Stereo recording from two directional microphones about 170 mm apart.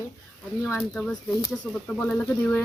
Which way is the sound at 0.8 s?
5° left (ahead or behind).